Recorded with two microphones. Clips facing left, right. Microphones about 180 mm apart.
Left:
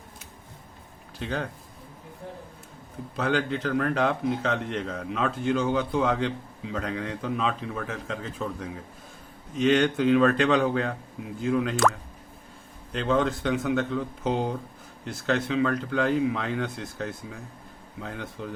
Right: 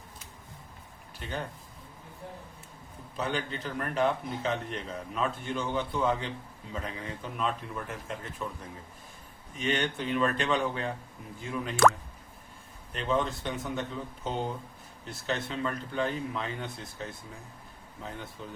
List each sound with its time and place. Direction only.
1.2 s a man's voice: 90° left
3.2 s a man's voice: 90° left
12.9 s a man's voice: 90° left